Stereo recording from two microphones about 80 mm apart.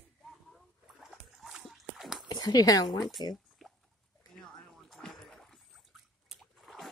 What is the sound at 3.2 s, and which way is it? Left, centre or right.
Speech, left.